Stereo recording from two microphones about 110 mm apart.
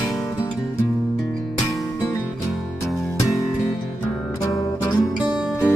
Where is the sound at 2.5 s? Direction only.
Centre (ahead or behind).